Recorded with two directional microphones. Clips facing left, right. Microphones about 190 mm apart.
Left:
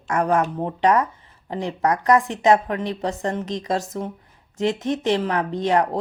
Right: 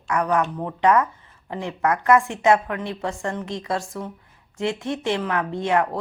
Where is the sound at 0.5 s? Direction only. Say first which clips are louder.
Even; 30° left (ahead or behind).